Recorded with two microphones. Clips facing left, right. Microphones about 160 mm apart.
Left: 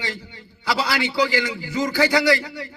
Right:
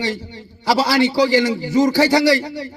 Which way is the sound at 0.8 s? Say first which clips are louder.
Right 6 dB; 35° right (ahead or behind).